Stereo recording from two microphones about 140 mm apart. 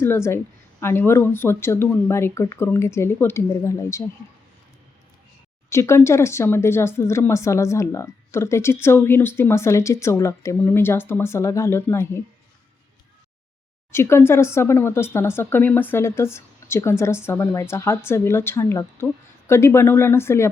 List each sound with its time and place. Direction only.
0.0 s speech: 20° left (ahead or behind)
5.6 s speech: 20° left (ahead or behind)
13.9 s speech: 20° left (ahead or behind)